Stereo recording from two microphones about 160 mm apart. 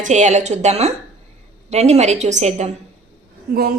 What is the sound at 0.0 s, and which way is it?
Speech, 50° right (ahead or behind).